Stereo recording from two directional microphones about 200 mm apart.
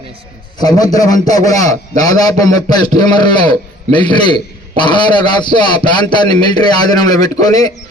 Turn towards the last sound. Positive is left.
turn(degrees=20)  # may be behind; listen again after turning